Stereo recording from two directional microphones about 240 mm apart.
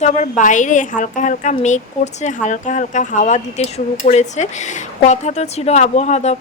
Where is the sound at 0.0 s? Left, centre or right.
Left.